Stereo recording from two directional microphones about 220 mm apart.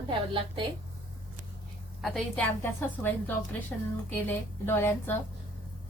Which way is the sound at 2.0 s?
5° left (ahead or behind).